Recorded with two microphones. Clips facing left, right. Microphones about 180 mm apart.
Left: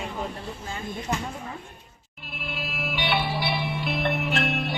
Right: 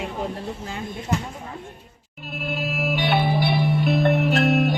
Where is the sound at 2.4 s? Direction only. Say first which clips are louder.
Right 8 dB; 45° right (ahead or behind).